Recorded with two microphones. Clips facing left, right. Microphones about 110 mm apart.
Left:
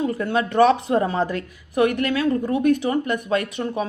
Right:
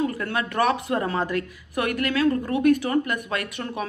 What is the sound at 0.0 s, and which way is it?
Speech, 25° left (ahead or behind).